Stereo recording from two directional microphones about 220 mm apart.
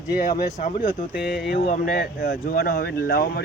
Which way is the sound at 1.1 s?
5° right (ahead or behind).